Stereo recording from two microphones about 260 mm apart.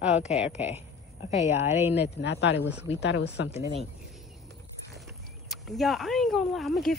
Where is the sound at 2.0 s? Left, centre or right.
Left.